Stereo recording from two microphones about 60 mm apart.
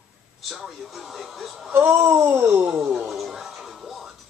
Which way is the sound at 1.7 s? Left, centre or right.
Right.